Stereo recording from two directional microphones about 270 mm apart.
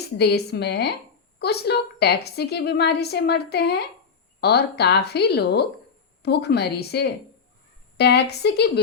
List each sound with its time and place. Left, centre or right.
0.2 s a woman's voice: left